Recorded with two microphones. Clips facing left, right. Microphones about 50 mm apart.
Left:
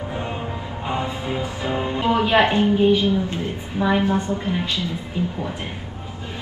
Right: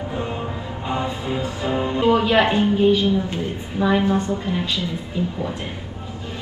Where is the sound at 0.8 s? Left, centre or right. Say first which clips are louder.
Right 1 dB; left.